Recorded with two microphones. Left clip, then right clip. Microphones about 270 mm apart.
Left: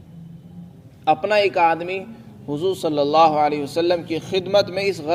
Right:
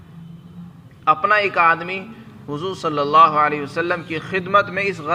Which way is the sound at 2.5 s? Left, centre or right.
Left.